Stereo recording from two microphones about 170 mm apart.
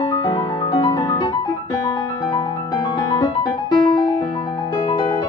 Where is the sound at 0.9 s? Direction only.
20° left (ahead or behind).